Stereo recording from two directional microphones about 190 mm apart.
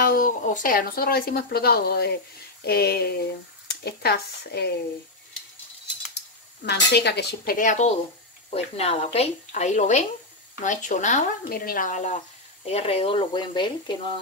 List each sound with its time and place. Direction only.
0.0 s speech: 45° left (ahead or behind)
6.6 s a woman's voice: 60° left (ahead or behind); by 13.9 s 25° left (ahead or behind)